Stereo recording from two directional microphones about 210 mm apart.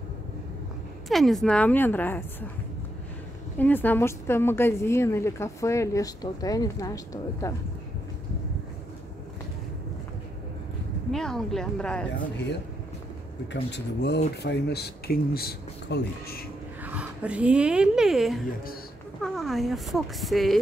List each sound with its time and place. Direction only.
1.0 s speech: centre (ahead or behind)
3.5 s speech: 10° left (ahead or behind)
11.1 s a woman's voice: centre (ahead or behind)
13.5 s speech: 55° left (ahead or behind)
16.8 s a woman's voice: 5° right (ahead or behind)